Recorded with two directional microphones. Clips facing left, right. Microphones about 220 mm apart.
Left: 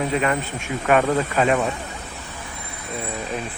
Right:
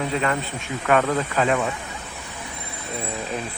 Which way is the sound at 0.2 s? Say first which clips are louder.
Left 2 dB; 15° left (ahead or behind).